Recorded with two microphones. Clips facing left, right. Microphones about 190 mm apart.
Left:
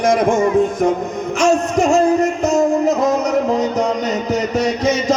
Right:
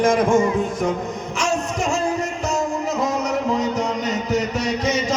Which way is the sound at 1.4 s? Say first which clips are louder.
Left 8 dB; 45° left (ahead or behind).